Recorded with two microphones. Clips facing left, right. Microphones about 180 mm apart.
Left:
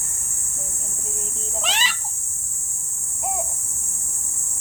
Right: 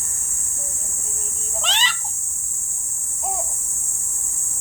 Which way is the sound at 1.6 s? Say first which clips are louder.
Right 1 dB; 5° left (ahead or behind).